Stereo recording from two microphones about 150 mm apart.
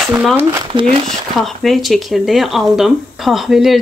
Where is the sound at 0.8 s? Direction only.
50° right (ahead or behind).